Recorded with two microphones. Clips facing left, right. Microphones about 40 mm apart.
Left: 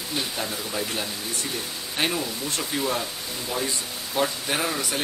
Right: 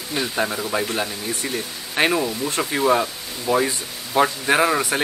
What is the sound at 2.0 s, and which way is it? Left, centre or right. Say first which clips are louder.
Speech: right 7 dB; right.